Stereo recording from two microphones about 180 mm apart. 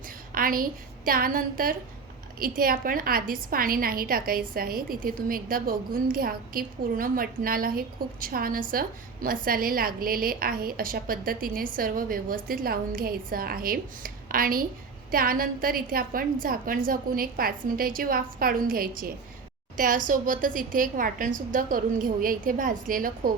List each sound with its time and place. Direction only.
0.3 s a woman's voice: 50° right (ahead or behind)